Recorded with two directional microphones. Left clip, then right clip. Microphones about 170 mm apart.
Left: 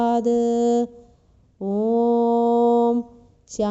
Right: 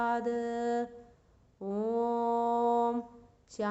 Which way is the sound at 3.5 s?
40° left (ahead or behind).